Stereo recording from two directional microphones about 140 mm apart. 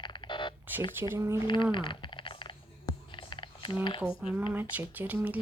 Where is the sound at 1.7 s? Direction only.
35° left (ahead or behind).